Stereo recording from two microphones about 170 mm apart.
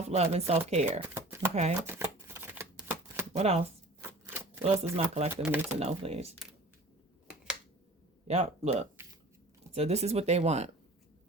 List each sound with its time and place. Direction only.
0.1 s speech: 40° right (ahead or behind)
1.1 s shuffling cards: 15° right (ahead or behind)
1.9 s typewriter: 15° right (ahead or behind)
3.3 s speech: 40° right (ahead or behind)
4.2 s shuffling cards: 15° right (ahead or behind)
4.6 s speech: 40° right (ahead or behind)
5.3 s speech: 10° right (ahead or behind)
5.8 s speech: 40° right (ahead or behind)
8.3 s speech: 40° right (ahead or behind)